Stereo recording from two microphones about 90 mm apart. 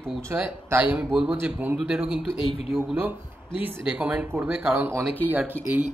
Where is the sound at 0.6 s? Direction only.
20° right (ahead or behind).